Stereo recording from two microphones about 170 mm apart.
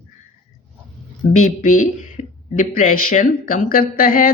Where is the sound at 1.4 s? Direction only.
50° left (ahead or behind).